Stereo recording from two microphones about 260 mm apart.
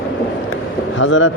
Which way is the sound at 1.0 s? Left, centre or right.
Left.